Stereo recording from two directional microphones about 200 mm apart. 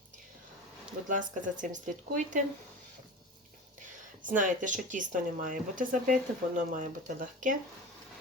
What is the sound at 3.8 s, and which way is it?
Speech, 40° right (ahead or behind).